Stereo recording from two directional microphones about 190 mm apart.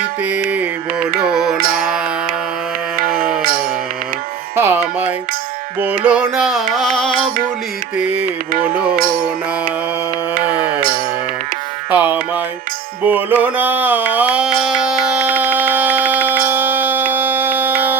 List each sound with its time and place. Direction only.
0.2 s music: 5° right (ahead or behind)
3.4 s mantra: 50° right (ahead or behind)
4.5 s music: 10° right (ahead or behind)
10.4 s music: 10° right (ahead or behind)
10.8 s music: 50° right (ahead or behind)
11.9 s music: 10° right (ahead or behind)